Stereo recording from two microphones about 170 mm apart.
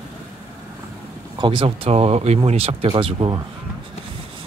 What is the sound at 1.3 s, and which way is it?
Speech, 30° right (ahead or behind).